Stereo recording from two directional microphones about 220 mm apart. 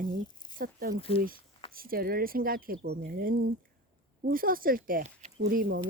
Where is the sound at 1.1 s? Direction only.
25° left (ahead or behind).